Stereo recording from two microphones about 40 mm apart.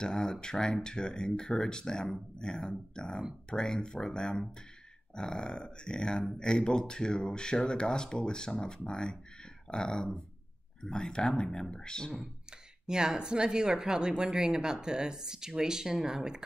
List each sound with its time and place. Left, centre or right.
0.0 s speech: centre
12.8 s speech: centre